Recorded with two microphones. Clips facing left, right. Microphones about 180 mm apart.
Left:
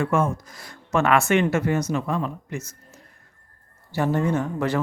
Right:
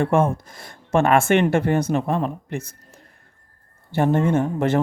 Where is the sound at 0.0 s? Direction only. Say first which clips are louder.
Right 4 dB; 55° right (ahead or behind).